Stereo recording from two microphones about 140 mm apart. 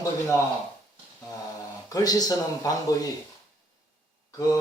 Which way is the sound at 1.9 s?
25° left (ahead or behind).